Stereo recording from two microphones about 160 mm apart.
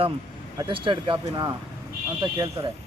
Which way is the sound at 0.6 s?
30° right (ahead or behind).